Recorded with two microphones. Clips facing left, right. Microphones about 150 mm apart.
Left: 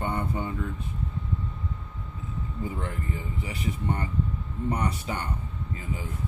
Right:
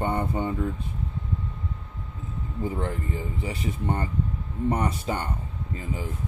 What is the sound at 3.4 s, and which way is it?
Speech, 30° right (ahead or behind).